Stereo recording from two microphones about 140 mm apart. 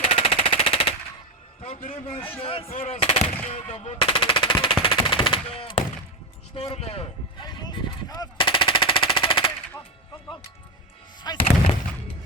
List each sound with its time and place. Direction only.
0.0 s machine gun: 40° left (ahead or behind)
1.9 s speech: 45° left (ahead or behind)
3.4 s machine gun: 45° left (ahead or behind)
6.5 s speech: 40° left (ahead or behind)
7.4 s machine gun: 30° left (ahead or behind)
11.3 s speech: 30° left (ahead or behind)